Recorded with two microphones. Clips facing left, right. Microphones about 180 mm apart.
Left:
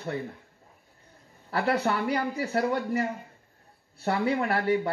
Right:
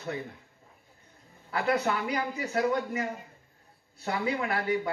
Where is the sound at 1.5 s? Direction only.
35° left (ahead or behind).